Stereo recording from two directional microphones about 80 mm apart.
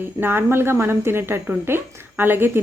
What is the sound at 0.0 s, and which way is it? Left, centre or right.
A woman's voice, right.